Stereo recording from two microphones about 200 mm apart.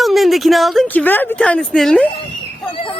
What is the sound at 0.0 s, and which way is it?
Speech, centre (ahead or behind).